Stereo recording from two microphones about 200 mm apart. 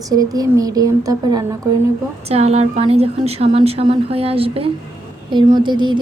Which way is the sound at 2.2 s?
30° right (ahead or behind).